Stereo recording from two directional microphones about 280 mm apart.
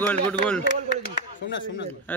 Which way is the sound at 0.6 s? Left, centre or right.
Left.